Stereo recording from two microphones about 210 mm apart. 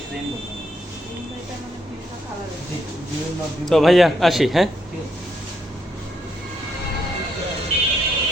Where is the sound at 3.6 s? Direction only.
Centre (ahead or behind).